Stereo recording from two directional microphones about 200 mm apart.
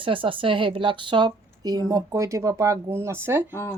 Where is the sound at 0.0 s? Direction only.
25° right (ahead or behind).